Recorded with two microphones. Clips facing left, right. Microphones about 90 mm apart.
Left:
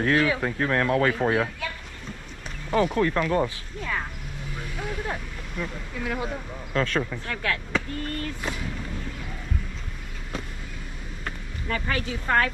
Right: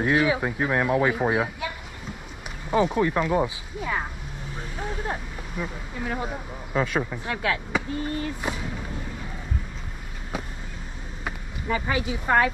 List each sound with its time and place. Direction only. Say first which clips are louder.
0.0 s speech: right 1 dB; 15° right (ahead or behind)
2.7 s speech: right 1 dB; 15° right (ahead or behind)
4.6 s vehicle: even; 25° right (ahead or behind)
5.6 s speech: even; 20° right (ahead or behind)
11.2 s speech: right 3 dB; 15° right (ahead or behind)